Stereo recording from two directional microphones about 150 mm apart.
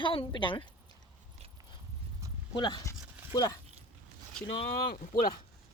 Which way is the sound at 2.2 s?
20° right (ahead or behind).